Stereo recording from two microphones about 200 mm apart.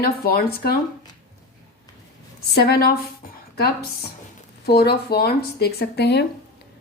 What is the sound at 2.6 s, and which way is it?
Speech, 50° left (ahead or behind).